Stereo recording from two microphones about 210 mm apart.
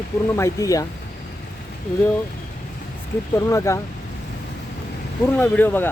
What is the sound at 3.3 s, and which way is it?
Speech, 15° left (ahead or behind).